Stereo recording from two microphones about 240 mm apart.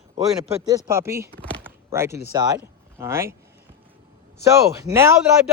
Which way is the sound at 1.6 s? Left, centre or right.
Centre.